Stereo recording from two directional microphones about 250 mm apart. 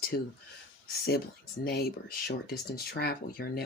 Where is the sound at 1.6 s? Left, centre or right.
Left.